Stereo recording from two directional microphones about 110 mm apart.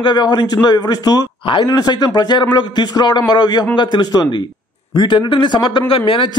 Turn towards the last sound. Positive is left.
turn(degrees=50)  # may be behind; listen again after turning